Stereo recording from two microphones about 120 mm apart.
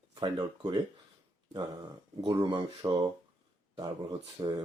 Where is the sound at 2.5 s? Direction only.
40° right (ahead or behind).